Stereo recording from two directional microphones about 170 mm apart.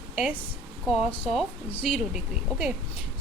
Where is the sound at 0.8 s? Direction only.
Centre (ahead or behind).